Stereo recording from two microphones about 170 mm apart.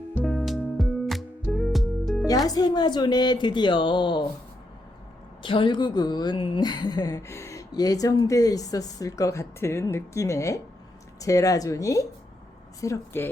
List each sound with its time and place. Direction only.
0.1 s music: 10° left (ahead or behind)
2.2 s a woman's voice: 20° left (ahead or behind)
5.4 s a woman's voice: 30° left (ahead or behind)